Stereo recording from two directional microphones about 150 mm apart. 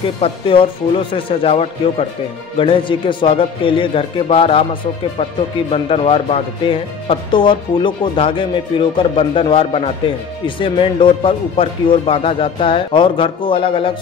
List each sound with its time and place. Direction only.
0.2 s speech: 35° left (ahead or behind)
5.7 s speech: 40° left (ahead or behind)